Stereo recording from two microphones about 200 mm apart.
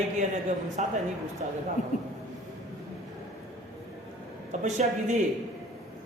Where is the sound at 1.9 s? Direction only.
35° left (ahead or behind).